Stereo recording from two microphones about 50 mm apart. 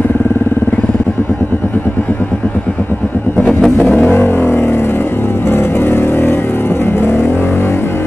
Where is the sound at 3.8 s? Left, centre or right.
Left.